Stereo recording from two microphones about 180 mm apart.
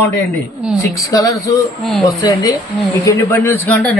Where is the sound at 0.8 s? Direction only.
20° left (ahead or behind).